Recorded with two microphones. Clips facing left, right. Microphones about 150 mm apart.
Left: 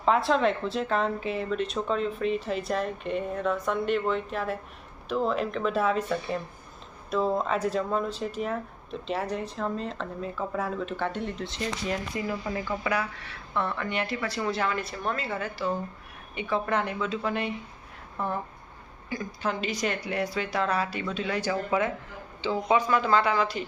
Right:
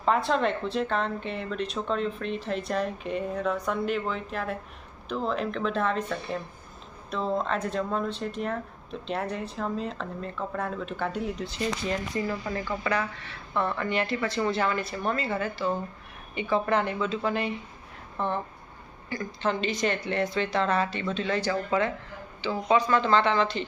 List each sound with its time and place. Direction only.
0.0 s speech: centre (ahead or behind)
12.1 s speech: 10° left (ahead or behind)
19.1 s speech: 10° left (ahead or behind)
22.4 s speech: 20° left (ahead or behind)
22.9 s speech: 5° left (ahead or behind)